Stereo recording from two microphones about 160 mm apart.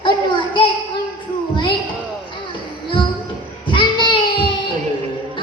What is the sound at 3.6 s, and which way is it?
Child singing, 30° left (ahead or behind).